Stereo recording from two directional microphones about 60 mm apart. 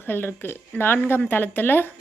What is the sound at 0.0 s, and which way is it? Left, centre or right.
A woman's voice, left.